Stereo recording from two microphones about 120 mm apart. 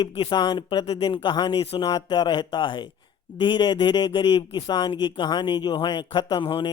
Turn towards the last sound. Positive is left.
turn(degrees=45)  # may be behind; listen again after turning